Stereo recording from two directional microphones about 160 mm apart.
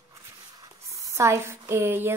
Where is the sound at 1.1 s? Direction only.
15° right (ahead or behind).